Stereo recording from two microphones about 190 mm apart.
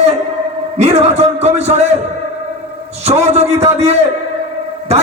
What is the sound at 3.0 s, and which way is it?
A man's voice, 35° right (ahead or behind).